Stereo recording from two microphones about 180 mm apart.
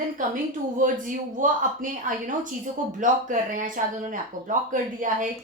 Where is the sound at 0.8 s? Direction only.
45° right (ahead or behind).